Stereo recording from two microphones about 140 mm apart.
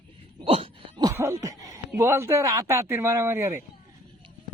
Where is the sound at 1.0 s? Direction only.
20° right (ahead or behind).